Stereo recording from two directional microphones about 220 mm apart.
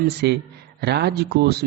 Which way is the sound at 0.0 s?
50° right (ahead or behind).